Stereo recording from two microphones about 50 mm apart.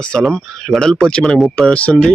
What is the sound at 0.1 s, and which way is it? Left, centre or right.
Speech, centre.